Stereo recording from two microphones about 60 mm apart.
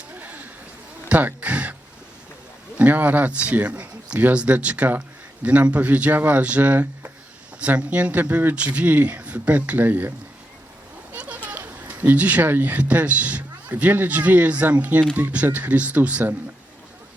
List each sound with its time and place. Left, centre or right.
0.1 s a sound: right
2.7 s a man's voice: right
11.2 s speech: right